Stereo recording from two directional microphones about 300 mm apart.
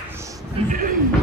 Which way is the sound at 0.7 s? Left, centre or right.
Right.